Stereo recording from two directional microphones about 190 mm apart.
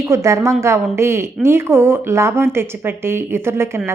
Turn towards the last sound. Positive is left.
turn(degrees=-15)  # may be behind; listen again after turning